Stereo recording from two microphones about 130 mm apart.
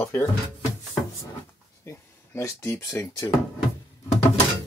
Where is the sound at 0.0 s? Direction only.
20° left (ahead or behind).